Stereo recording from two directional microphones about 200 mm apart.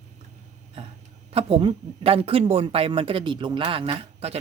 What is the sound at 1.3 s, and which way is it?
Speech, 30° right (ahead or behind).